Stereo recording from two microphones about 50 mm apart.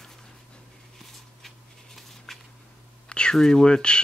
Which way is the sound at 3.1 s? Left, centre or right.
Centre.